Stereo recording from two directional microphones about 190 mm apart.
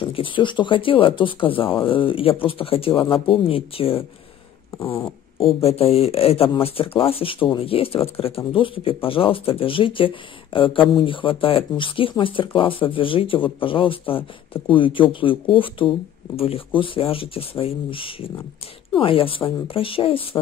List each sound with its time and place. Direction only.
0.0 s speech: 25° left (ahead or behind)
4.6 s cat: 15° left (ahead or behind)
5.6 s speech: 30° left (ahead or behind)